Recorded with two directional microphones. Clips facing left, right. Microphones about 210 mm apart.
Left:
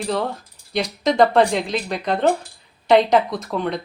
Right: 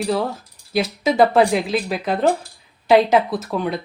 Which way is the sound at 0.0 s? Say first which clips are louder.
Right 2 dB; 5° right (ahead or behind).